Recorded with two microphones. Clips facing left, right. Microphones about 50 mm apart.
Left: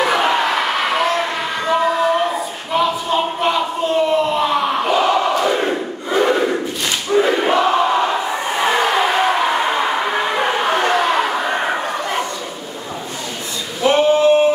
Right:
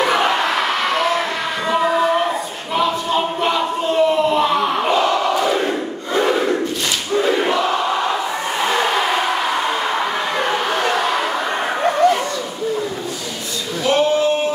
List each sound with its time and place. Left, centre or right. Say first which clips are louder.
0.0 s a sound: left 1 dB; centre
7.1 s crowd: left 3 dB; centre
13.8 s male singing: left 3 dB; left